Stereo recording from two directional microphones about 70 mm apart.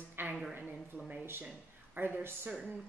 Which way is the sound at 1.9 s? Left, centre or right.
Right.